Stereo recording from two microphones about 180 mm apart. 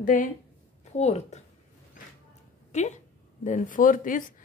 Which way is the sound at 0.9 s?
35° left (ahead or behind).